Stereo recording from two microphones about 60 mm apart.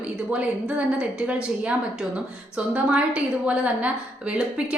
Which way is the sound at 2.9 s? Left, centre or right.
Centre.